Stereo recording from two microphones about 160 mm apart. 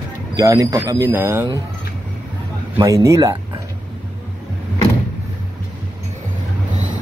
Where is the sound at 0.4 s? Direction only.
20° right (ahead or behind).